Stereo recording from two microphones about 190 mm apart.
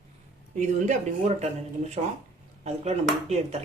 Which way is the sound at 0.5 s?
40° right (ahead or behind).